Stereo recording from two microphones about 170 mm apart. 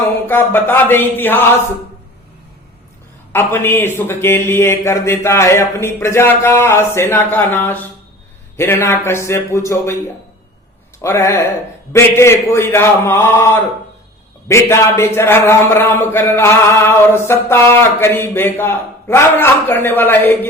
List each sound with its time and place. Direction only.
0.3 s a man's voice: 10° left (ahead or behind)
3.3 s a man's voice: 15° left (ahead or behind)
11.0 s a man's voice: 15° left (ahead or behind)